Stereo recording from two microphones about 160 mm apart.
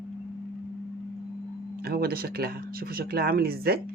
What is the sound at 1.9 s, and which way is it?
Speech, 70° right (ahead or behind).